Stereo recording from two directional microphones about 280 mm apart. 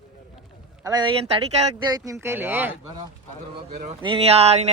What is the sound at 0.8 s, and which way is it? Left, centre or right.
Speech, centre.